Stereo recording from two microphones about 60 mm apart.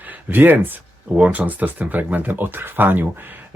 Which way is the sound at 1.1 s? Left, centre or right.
Right.